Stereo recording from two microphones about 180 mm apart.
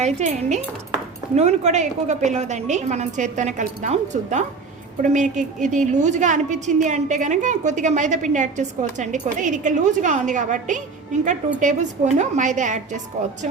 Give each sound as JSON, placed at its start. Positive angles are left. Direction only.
{"t": 0.0, "sound": "a woman's voice", "side_deg": -40}